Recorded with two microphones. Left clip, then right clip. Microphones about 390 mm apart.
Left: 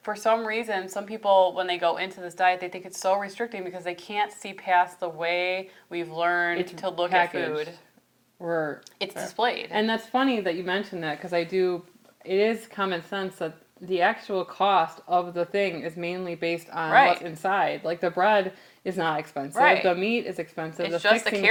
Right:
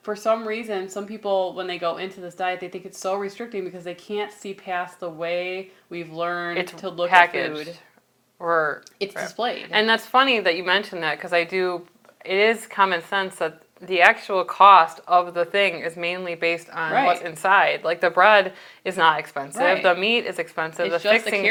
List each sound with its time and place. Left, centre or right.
0.0 s speech: left
7.1 s speech: right
9.0 s speech: left
9.7 s speech: right
21.1 s speech: left